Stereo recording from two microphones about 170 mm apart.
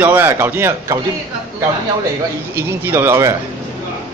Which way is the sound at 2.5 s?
15° right (ahead or behind).